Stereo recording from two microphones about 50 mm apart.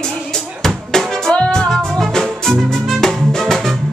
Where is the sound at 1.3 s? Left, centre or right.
Centre.